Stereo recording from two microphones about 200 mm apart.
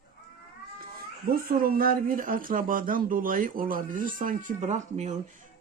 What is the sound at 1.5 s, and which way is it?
Speech, 45° right (ahead or behind).